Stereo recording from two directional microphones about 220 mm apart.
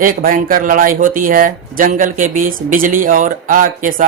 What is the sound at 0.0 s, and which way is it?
Speech, 40° right (ahead or behind).